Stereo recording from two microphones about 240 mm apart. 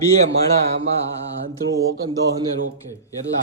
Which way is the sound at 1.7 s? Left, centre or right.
Right.